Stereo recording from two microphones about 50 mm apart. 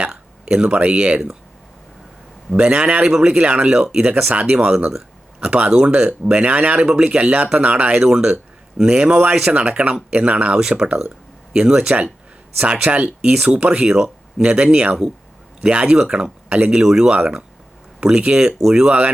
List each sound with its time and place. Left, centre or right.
0.1 s a sound: centre
0.7 s speech: right
2.6 s speech: right
7.9 s speech: centre
16.8 s speech: centre
17.1 s speech: right